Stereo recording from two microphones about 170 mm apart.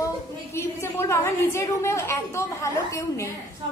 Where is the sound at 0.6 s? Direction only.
15° left (ahead or behind).